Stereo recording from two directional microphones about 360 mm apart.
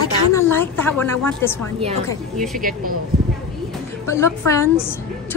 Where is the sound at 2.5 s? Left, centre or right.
Right.